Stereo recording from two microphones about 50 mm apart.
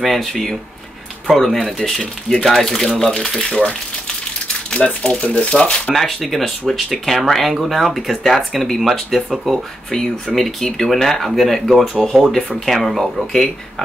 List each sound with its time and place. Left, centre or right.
0.0 s speech: centre
4.8 s speech: centre
5.2 s speech: left
6.2 s speech: centre
9.8 s speech: centre
12.4 s speech: centre
12.6 s speech: centre